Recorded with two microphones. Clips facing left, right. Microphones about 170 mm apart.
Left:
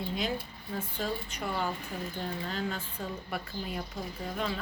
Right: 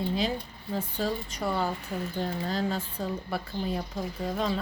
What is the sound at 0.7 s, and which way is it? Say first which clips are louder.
A woman's voice: right 4 dB; 35° right (ahead or behind).